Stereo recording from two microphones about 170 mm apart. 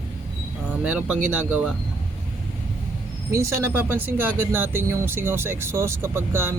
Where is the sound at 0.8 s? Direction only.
5° right (ahead or behind).